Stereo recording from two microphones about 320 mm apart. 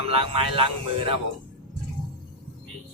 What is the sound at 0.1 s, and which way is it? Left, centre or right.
Speech, centre.